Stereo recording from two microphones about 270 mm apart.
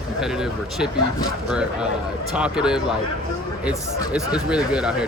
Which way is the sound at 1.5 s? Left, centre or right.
Centre.